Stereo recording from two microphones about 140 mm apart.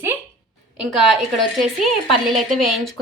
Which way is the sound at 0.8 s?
Centre (ahead or behind).